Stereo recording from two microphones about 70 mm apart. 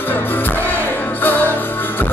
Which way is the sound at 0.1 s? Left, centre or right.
Left.